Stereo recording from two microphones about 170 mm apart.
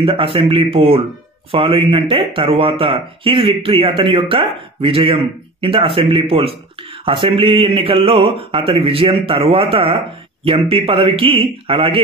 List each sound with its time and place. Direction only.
0.0 s speech: 30° right (ahead or behind)